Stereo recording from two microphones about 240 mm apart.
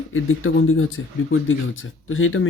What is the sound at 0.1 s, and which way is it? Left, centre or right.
Speech, left.